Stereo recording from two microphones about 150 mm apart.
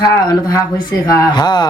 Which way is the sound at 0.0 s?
25° left (ahead or behind).